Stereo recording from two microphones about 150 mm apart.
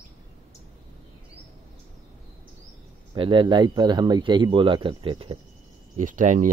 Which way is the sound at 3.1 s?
35° right (ahead or behind).